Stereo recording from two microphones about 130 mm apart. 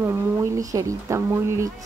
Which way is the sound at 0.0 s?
25° right (ahead or behind).